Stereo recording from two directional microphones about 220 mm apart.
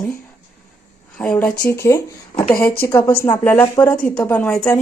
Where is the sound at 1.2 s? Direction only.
5° left (ahead or behind).